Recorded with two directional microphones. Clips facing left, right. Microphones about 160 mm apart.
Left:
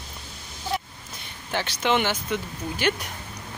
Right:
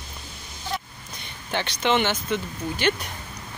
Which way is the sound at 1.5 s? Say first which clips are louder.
Right 1 dB; 5° left (ahead or behind).